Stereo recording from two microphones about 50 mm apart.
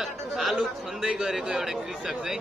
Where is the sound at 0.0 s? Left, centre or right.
Centre.